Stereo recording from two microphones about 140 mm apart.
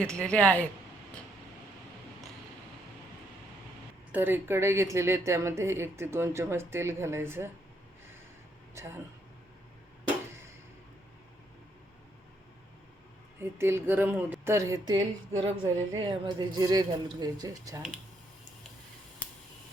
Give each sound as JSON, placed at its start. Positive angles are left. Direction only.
{"t": 0.0, "sound": "speech", "side_deg": 10}
{"t": 4.1, "sound": "speech", "side_deg": -15}
{"t": 8.8, "sound": "a woman's voice", "side_deg": -20}
{"t": 13.4, "sound": "a woman's voice", "side_deg": -15}
{"t": 19.2, "sound": "finger snapping", "side_deg": 10}